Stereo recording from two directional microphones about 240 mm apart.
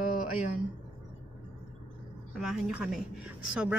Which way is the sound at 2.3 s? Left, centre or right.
Centre.